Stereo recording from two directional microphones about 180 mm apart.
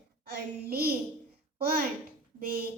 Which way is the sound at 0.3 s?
60° right (ahead or behind).